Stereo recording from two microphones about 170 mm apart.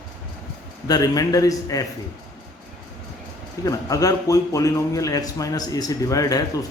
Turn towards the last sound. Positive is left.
turn(degrees=20)  # may be behind; listen again after turning